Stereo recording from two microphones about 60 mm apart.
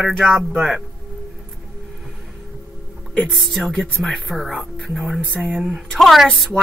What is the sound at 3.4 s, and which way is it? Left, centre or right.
Speech, centre.